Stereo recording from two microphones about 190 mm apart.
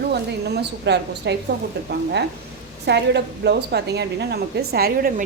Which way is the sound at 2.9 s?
65° right (ahead or behind).